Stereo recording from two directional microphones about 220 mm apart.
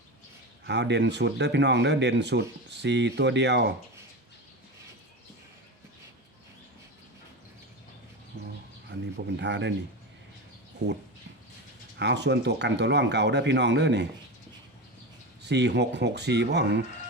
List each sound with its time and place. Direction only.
0.6 s speech: 50° right (ahead or behind)
8.9 s speech: 55° right (ahead or behind)
11.9 s speech: 50° right (ahead or behind)
15.4 s speech: 50° right (ahead or behind)